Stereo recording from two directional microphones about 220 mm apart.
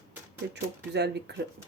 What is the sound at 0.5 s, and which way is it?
Speech, 50° right (ahead or behind).